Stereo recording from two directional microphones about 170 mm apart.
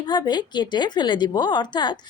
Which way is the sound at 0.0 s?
25° left (ahead or behind).